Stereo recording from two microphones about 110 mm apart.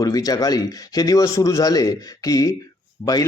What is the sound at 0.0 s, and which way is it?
Speech, 35° left (ahead or behind).